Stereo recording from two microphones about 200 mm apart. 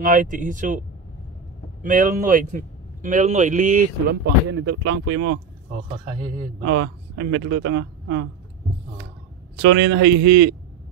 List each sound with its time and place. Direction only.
0.0 s speech: 40° right (ahead or behind)
1.8 s speech: 40° right (ahead or behind)
4.5 s a man's voice: 60° right (ahead or behind)
6.6 s a man's voice: 65° right (ahead or behind)
9.6 s a man's voice: 60° right (ahead or behind)